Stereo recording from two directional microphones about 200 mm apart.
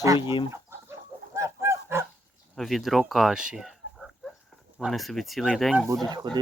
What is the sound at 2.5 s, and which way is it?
Speech, centre (ahead or behind).